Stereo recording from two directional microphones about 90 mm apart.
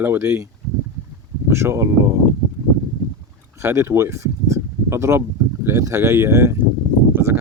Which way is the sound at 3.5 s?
30° right (ahead or behind).